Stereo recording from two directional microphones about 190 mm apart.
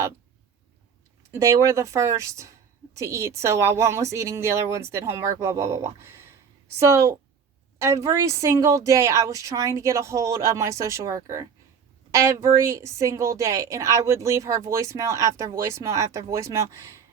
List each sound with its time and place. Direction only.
1.3 s a woman's voice: 15° right (ahead or behind)